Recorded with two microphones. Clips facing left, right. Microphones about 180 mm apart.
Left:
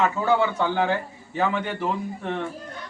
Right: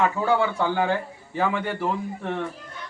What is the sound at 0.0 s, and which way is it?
Speech, 10° right (ahead or behind).